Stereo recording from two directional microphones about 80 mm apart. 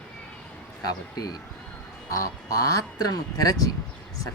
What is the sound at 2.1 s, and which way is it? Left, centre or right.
Speech, left.